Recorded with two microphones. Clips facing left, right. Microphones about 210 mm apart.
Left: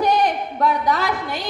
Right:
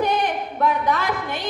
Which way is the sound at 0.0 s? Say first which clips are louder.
Left 3 dB; 40° left (ahead or behind).